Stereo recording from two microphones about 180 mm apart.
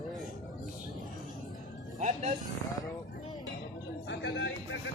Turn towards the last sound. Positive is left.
turn(degrees=80)